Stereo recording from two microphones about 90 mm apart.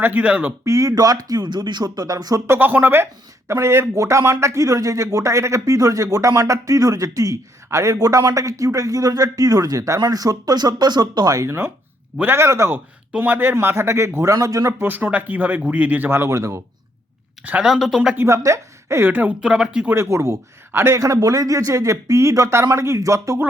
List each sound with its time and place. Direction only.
0.0 s a man's voice: 20° right (ahead or behind)
0.6 s speech: 35° right (ahead or behind)
2.5 s speech: 20° right (ahead or behind); by 11.4 s 45° right (ahead or behind)
11.4 s a man's voice: 30° right (ahead or behind)
14.3 s speech: 40° right (ahead or behind)
14.8 s a man's voice: 20° right (ahead or behind)
17.6 s speech: 5° right (ahead or behind)
18.3 s a man's voice: 35° right (ahead or behind); by 19.9 s 10° right (ahead or behind)
19.9 s speech: 30° right (ahead or behind)